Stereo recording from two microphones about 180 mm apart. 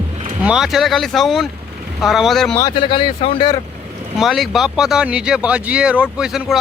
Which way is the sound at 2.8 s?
25° left (ahead or behind).